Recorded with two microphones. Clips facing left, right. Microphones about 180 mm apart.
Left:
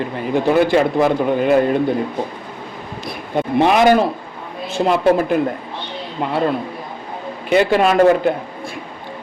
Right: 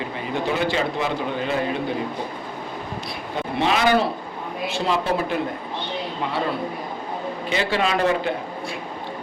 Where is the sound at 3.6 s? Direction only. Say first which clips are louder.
Left 6 dB; 50° left (ahead or behind).